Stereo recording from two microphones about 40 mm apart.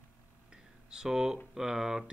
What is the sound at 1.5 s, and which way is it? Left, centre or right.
Speech, centre.